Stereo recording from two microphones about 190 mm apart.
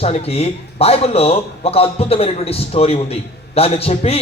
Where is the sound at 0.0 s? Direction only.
30° left (ahead or behind).